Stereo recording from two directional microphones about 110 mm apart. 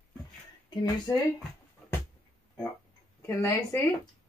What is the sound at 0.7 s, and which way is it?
Speech, 40° left (ahead or behind).